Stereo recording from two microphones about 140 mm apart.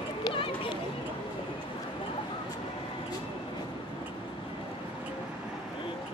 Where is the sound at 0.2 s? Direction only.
40° left (ahead or behind).